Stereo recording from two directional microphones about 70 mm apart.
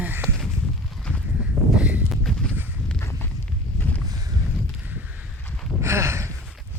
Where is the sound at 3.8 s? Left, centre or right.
Left.